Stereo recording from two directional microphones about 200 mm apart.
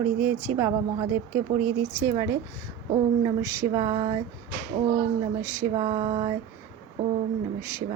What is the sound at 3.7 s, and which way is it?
Speech, 30° right (ahead or behind).